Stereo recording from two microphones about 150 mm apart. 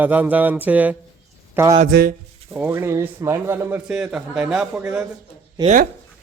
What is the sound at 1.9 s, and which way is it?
Speech, 90° right.